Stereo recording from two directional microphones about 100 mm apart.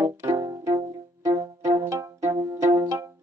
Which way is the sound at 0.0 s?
30° right (ahead or behind).